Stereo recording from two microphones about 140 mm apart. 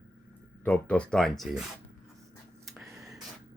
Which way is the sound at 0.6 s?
10° left (ahead or behind).